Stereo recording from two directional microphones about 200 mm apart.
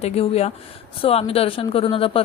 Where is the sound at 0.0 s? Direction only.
30° left (ahead or behind).